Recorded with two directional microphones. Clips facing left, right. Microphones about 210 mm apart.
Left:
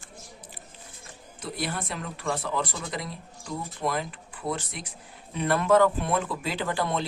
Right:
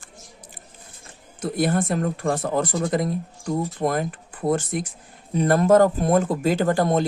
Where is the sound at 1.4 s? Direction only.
50° right (ahead or behind).